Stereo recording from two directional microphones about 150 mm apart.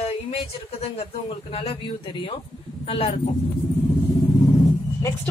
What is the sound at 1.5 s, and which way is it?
Speech, 40° left (ahead or behind).